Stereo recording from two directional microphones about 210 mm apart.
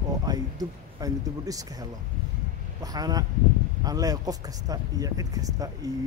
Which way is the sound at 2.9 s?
20° right (ahead or behind).